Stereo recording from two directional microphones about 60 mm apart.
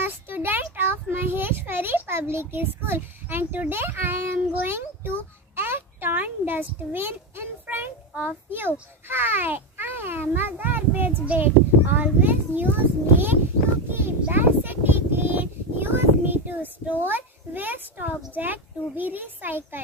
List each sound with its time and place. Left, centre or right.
0.0 s a sound: right
1.1 s a child's voice: right
5.6 s a sound: right
8.2 s a child's voice: right
10.9 s a child's voice: right
11.2 s a child's voice: right